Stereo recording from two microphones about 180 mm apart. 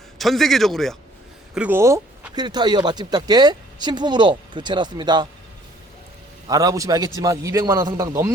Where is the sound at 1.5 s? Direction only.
10° right (ahead or behind).